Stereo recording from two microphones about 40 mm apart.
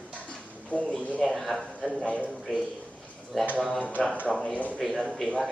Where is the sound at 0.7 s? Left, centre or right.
Right.